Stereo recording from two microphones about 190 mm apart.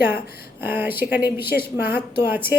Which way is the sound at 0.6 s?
10° right (ahead or behind).